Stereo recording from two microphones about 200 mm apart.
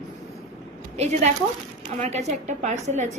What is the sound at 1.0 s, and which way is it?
A woman's voice, 35° right (ahead or behind).